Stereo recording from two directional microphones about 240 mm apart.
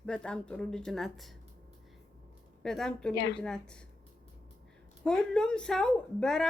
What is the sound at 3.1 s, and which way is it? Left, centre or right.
Speech, left.